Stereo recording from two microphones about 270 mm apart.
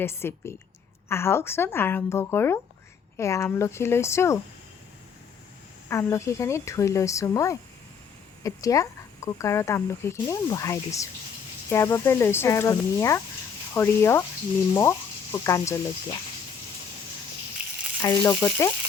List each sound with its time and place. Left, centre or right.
0.0 s speech: centre
5.9 s speech: centre
18.0 s speech: centre